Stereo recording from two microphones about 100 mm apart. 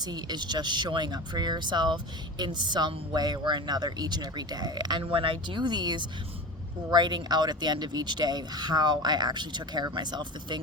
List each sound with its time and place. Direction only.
0.0 s speech: 45° right (ahead or behind)
5.1 s speech: 60° right (ahead or behind)